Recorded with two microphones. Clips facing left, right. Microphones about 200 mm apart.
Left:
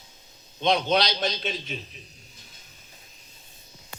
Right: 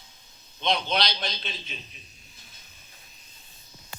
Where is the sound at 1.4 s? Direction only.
45° left (ahead or behind).